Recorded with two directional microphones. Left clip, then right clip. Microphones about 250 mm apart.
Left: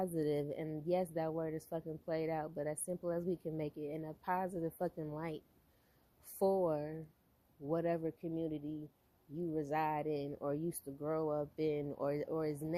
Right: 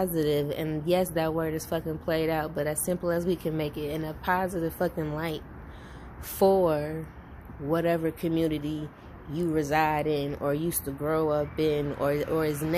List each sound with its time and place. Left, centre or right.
0.0 s speech: left
6.4 s speech: left